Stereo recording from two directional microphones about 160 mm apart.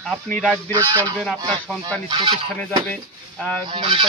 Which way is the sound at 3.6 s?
30° right (ahead or behind).